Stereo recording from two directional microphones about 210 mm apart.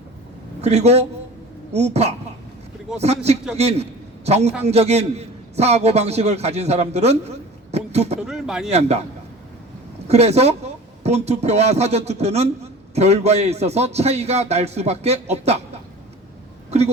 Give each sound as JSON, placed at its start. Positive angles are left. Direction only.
{"t": 0.6, "sound": "a man's voice", "side_deg": -30}
{"t": 8.3, "sound": "speech", "side_deg": -5}
{"t": 8.7, "sound": "a man's voice", "side_deg": -30}
{"t": 10.1, "sound": "a man's voice", "side_deg": -30}